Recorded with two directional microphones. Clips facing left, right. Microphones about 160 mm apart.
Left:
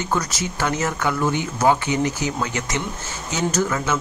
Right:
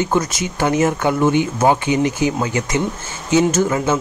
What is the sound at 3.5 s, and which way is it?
Speech, 25° right (ahead or behind).